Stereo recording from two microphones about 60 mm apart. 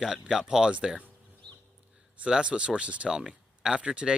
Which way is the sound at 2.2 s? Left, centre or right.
Centre.